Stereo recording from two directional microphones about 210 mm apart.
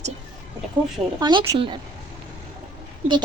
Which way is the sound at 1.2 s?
20° right (ahead or behind).